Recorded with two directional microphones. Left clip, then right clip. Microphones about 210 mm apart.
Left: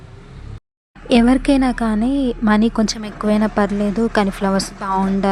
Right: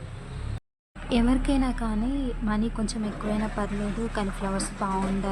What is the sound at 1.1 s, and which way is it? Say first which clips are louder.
Speech: left 11 dB; 35° left (ahead or behind).